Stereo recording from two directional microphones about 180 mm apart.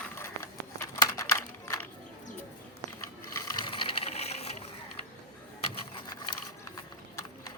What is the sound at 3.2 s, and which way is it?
Ratchet, 15° left (ahead or behind).